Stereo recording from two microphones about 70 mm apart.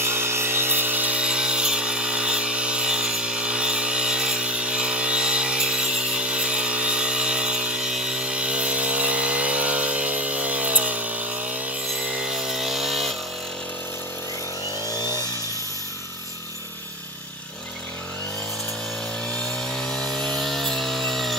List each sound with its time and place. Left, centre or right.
0.0 s a sound: right
12.2 s chainsaw: centre
19.3 s chainsaw: centre